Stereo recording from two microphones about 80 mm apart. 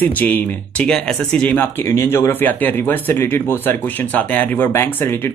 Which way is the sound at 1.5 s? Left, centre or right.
Left.